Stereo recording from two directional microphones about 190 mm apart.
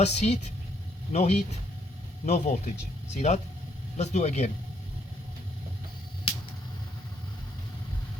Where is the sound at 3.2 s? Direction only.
35° left (ahead or behind).